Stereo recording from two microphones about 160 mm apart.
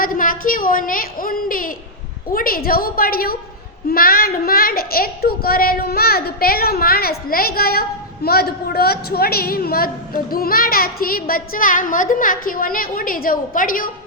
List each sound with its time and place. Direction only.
0.0 s a woman's voice: 60° left (ahead or behind)